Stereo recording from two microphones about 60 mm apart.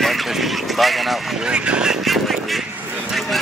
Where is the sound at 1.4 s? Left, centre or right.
Centre.